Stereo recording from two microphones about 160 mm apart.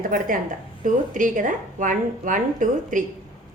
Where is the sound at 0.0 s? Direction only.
60° right (ahead or behind).